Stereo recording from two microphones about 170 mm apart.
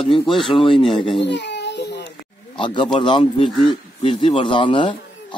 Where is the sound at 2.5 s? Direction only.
30° left (ahead or behind).